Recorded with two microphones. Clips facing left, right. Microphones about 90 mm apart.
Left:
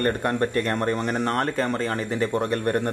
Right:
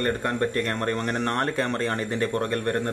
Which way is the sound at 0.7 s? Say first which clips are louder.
Left 2 dB; 10° left (ahead or behind).